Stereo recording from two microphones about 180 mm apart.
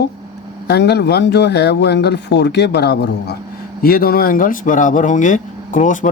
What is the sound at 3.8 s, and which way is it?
Speech, 55° left (ahead or behind).